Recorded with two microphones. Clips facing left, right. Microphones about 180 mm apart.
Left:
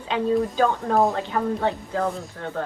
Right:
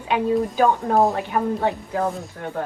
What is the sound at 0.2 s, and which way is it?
Speech, 15° right (ahead or behind).